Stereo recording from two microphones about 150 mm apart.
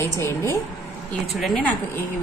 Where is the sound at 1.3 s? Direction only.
5° left (ahead or behind).